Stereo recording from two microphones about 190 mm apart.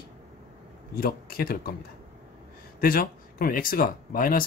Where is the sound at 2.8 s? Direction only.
50° left (ahead or behind).